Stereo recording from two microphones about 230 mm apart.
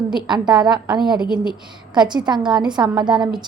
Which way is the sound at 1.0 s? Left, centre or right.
Centre.